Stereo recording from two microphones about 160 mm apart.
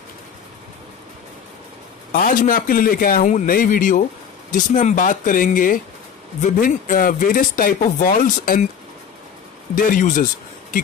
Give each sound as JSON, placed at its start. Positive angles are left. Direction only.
{"t": 2.1, "sound": "speech", "side_deg": 55}
{"t": 9.8, "sound": "speech", "side_deg": 55}